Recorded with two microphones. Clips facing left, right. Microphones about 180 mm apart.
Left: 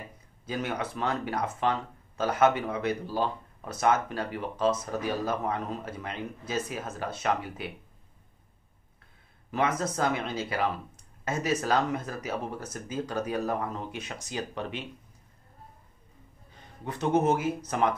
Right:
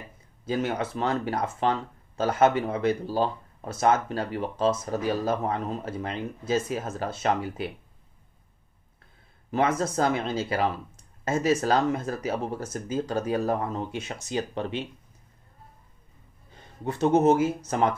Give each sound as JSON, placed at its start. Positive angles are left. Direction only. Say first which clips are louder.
{"t": 0.5, "sound": "speech", "louder": "right 5 dB", "side_deg": -30}
{"t": 5.9, "sound": "speech", "louder": "right 4 dB", "side_deg": -25}
{"t": 9.5, "sound": "speech", "louder": "right 3 dB", "side_deg": -30}
{"t": 16.8, "sound": "speech", "louder": "right 5 dB", "side_deg": -25}